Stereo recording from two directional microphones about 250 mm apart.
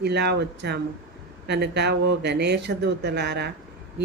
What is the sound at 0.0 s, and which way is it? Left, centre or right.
A woman's voice, right.